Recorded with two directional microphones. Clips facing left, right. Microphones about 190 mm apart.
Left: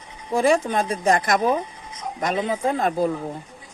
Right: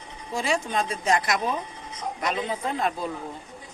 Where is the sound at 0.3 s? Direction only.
50° left (ahead or behind).